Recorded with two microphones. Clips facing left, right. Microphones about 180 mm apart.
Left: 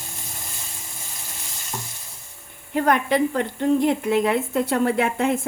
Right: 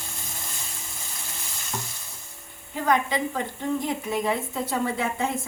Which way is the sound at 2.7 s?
65° left (ahead or behind).